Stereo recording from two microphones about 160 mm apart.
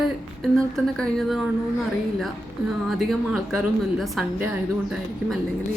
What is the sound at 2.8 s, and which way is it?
A woman's voice, centre (ahead or behind).